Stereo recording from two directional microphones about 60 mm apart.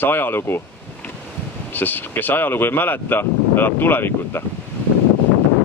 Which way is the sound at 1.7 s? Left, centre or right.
Left.